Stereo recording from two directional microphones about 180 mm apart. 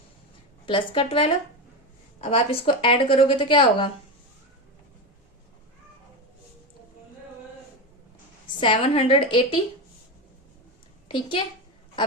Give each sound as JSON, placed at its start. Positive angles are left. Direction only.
{"t": 0.6, "sound": "a woman's voice", "side_deg": 25}
{"t": 8.4, "sound": "a woman's voice", "side_deg": 30}
{"t": 11.1, "sound": "a woman's voice", "side_deg": 30}